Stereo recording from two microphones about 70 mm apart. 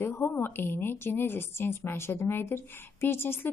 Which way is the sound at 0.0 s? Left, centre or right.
Left.